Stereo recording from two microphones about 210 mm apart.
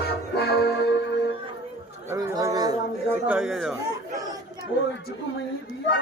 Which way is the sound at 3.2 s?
Centre (ahead or behind).